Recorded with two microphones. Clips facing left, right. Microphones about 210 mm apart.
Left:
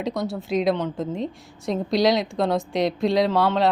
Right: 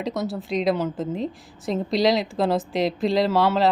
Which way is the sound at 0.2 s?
Centre (ahead or behind).